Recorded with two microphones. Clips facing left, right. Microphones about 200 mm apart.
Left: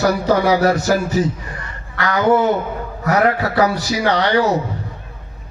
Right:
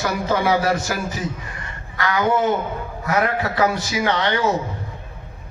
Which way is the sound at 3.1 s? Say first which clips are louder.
Left 5 dB; 40° left (ahead or behind).